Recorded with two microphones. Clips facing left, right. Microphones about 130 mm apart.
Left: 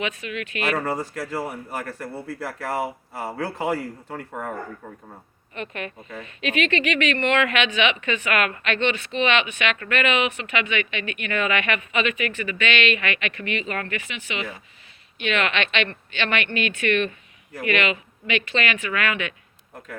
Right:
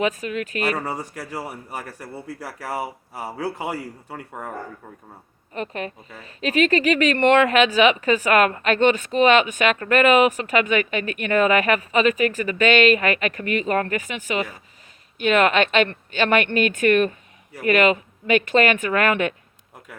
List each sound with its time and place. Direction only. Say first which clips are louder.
0.0 s speech: right 5 dB; 40° right (ahead or behind)
0.9 s a man's voice: left 3 dB; 15° right (ahead or behind)
5.5 s speech: right 3 dB; 35° right (ahead or behind)